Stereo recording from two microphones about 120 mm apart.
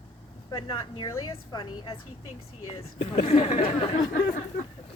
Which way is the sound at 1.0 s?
30° left (ahead or behind).